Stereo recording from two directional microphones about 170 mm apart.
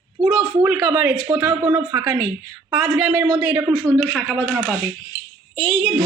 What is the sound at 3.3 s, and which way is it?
A woman's voice, 20° right (ahead or behind).